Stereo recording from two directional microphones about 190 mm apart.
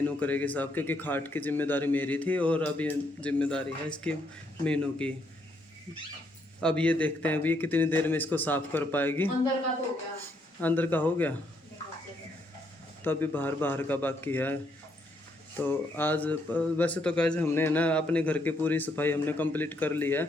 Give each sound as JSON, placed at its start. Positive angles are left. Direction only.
{"t": 0.2, "sound": "speech", "side_deg": 10}
{"t": 6.6, "sound": "speech", "side_deg": 5}
{"t": 10.6, "sound": "speech", "side_deg": 10}
{"t": 13.0, "sound": "speech", "side_deg": 10}